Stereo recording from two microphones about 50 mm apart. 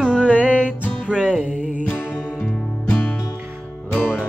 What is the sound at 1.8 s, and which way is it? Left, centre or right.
Music, left.